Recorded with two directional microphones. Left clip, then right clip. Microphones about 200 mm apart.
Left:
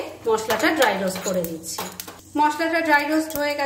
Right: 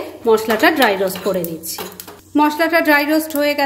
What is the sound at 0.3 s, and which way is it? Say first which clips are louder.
Speech: right 7 dB; 40° right (ahead or behind).